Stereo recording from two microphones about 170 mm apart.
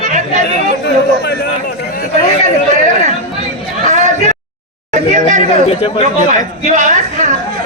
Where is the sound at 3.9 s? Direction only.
45° right (ahead or behind).